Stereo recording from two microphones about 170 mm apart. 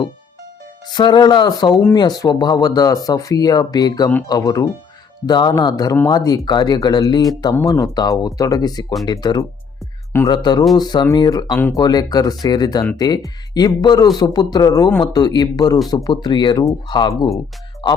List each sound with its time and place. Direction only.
0.9 s speech: 25° left (ahead or behind)
11.5 s speech: 10° left (ahead or behind)
11.8 s speech: 25° left (ahead or behind)